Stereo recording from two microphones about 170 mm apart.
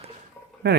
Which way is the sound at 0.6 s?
70° right (ahead or behind).